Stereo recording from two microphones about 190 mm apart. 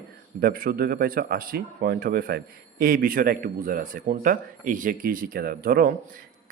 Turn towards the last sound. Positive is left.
turn(degrees=-50)  # may be behind; listen again after turning